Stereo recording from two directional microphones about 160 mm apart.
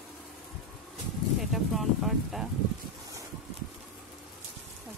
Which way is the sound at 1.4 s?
Centre (ahead or behind).